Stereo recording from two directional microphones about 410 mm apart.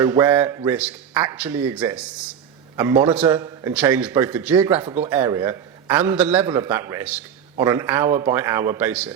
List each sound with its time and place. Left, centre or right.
0.0 s a man's voice: centre